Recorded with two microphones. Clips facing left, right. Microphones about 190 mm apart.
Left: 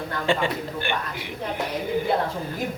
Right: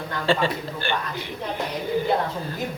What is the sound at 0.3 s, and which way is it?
A woman's voice, 15° left (ahead or behind).